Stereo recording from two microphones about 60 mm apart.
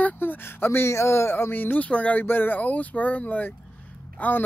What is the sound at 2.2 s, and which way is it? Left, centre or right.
Speech, left.